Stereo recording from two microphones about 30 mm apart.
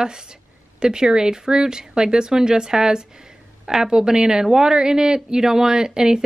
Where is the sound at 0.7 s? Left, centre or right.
Right.